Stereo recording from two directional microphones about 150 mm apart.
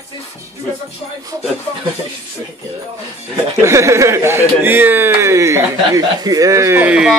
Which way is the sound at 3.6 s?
20° right (ahead or behind).